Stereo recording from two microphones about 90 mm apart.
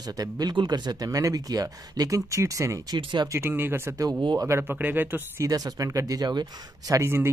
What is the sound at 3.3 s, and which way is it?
Speech, 25° right (ahead or behind).